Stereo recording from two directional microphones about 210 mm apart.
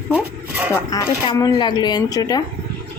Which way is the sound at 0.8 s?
15° left (ahead or behind).